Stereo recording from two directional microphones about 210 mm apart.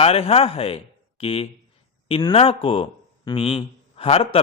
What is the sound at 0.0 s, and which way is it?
A man's voice, 30° left (ahead or behind).